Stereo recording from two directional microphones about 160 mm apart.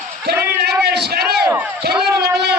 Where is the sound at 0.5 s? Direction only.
90° right.